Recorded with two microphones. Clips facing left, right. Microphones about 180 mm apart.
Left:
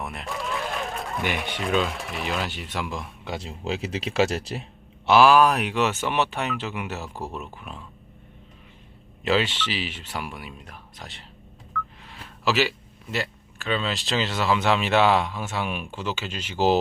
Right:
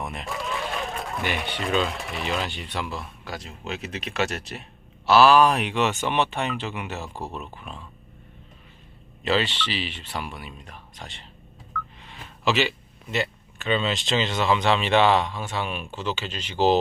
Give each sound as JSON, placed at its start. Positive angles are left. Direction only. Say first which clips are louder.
{"t": 0.0, "sound": "a sound", "louder": "even", "side_deg": 0}
{"t": 1.6, "sound": "speech", "louder": "left 1 dB", "side_deg": 0}
{"t": 3.3, "sound": "speech", "louder": "left 4 dB", "side_deg": 30}
{"t": 5.0, "sound": "speech", "louder": "even", "side_deg": 15}
{"t": 9.2, "sound": "speech", "louder": "left 1 dB", "side_deg": 10}